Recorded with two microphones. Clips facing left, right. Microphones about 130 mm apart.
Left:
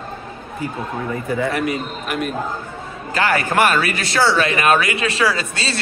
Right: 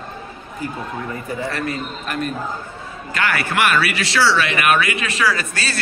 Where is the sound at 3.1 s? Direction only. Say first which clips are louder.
Left 3 dB; 35° left (ahead or behind).